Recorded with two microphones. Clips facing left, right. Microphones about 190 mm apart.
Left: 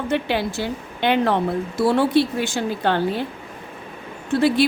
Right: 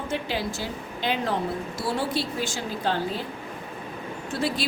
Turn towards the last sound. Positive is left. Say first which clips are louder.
# left 10 dB
turn(degrees=60)  # may be behind; listen again after turning